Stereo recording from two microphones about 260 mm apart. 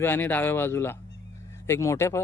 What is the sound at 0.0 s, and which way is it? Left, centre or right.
Speech, centre.